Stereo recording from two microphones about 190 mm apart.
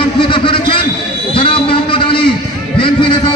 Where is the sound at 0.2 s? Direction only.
25° left (ahead or behind).